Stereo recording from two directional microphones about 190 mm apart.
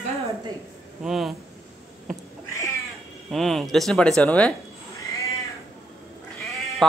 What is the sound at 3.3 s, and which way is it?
Speech, centre (ahead or behind).